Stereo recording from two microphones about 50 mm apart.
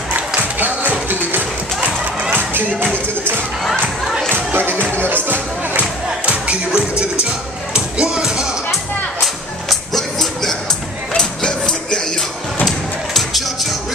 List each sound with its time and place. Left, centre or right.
0.6 s music: right
4.3 s music: right
5.0 s speech: right
5.8 s music: right
9.7 s music: centre
11.1 s mechanisms: centre
12.6 s music: centre